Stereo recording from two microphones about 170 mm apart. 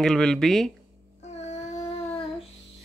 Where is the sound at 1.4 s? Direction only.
40° left (ahead or behind).